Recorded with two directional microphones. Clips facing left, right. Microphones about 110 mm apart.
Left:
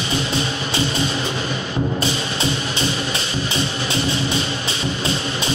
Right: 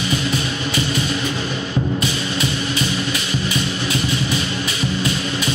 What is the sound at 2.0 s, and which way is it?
Music, 30° left (ahead or behind).